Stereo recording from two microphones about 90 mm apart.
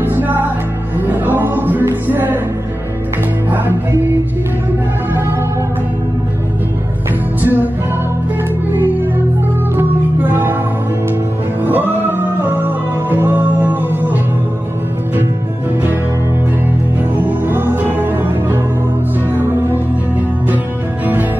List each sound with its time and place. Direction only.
0.0 s music: 20° right (ahead or behind)
3.4 s music: 20° right (ahead or behind)
7.3 s music: 20° right (ahead or behind)
9.8 s music: 20° right (ahead or behind)
11.6 s music: 20° right (ahead or behind)
17.2 s music: 25° right (ahead or behind)